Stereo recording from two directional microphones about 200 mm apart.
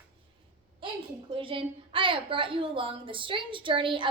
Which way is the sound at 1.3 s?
25° right (ahead or behind).